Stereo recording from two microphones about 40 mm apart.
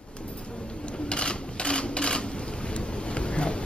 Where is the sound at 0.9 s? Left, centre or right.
Left.